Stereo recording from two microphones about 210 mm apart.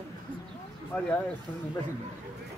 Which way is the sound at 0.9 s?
10° left (ahead or behind).